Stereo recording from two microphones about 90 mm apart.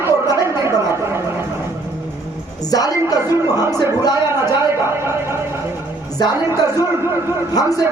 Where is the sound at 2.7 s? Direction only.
45° left (ahead or behind).